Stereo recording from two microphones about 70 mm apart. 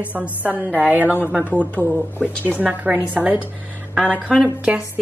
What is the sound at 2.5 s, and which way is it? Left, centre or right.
A woman's voice, right.